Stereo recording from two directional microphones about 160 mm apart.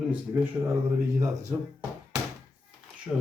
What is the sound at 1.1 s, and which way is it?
Speech, 20° right (ahead or behind).